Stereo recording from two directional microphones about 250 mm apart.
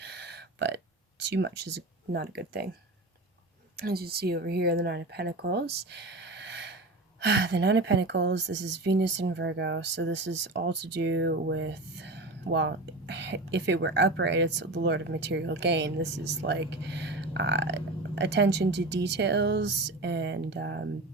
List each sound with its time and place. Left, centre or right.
0.0 s a sound: right
1.2 s speech: right
3.8 s speech: right